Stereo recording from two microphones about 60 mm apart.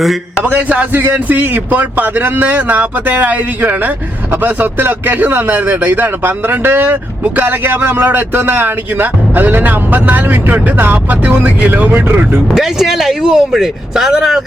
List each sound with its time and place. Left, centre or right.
0.4 s speech: right
11.9 s speech: right
12.5 s speech: centre